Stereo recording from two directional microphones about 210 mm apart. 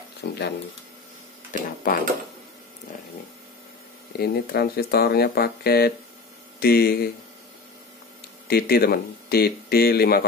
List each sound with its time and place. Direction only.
0.2 s speech: 55° left (ahead or behind)
1.5 s speech: 40° left (ahead or behind)
4.2 s speech: 50° left (ahead or behind)
8.5 s speech: 45° left (ahead or behind)